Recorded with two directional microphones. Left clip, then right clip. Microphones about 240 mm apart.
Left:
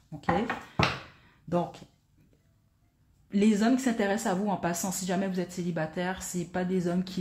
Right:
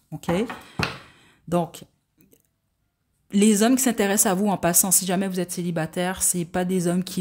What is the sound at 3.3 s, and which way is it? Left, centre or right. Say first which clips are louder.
A woman's voice: right 6 dB; right.